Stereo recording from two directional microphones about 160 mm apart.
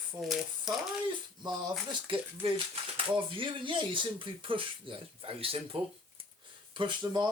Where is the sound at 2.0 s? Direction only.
35° right (ahead or behind).